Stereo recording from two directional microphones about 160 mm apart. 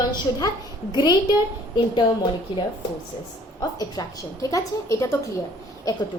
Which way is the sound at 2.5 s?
30° left (ahead or behind).